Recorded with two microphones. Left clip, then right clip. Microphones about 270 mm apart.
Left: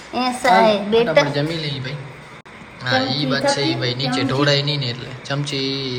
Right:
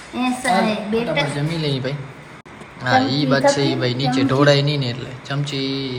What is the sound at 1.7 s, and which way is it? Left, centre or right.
A woman's voice, centre.